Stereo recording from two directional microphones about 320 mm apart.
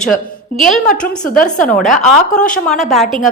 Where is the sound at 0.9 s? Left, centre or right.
Left.